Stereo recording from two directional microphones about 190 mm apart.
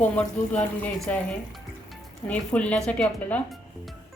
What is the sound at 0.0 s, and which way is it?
Speech, 10° left (ahead or behind).